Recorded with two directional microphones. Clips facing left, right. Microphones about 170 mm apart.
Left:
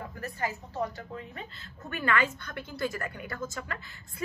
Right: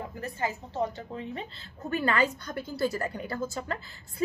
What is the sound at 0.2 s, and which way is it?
A woman's voice, 25° right (ahead or behind).